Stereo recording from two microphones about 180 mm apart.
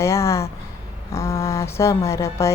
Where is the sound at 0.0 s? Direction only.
15° left (ahead or behind).